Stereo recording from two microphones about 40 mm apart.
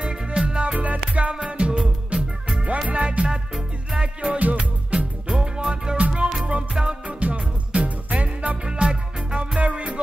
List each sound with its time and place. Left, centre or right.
0.0 s music: right
0.7 s music: right
1.3 s music: right
2.9 s music: right
4.4 s music: right
4.9 s music: right
5.9 s music: right
6.7 s music: centre
7.1 s music: right
8.6 s music: right
9.6 s music: right